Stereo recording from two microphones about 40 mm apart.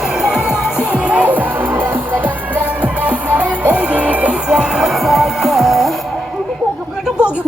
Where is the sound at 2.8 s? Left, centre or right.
Right.